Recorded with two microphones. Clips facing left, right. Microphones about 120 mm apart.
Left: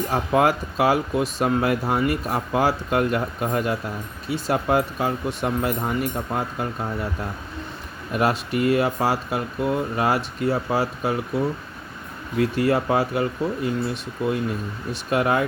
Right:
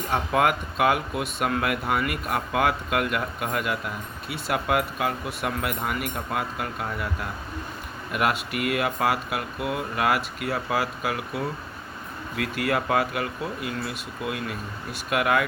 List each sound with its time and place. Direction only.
0.1 s speech: 35° left (ahead or behind)
8.1 s speech: 30° left (ahead or behind)
12.4 s speech: 30° left (ahead or behind)